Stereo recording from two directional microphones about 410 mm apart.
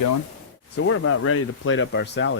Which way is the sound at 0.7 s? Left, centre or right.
Left.